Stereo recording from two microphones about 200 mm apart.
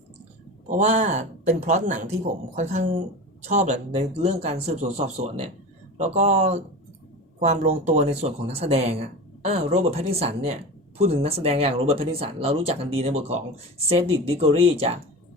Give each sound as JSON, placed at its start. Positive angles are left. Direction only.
{"t": 0.7, "sound": "speech", "side_deg": -35}
{"t": 14.4, "sound": "speech", "side_deg": -30}